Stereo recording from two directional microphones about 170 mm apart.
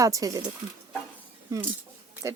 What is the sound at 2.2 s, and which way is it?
Speech, 20° right (ahead or behind).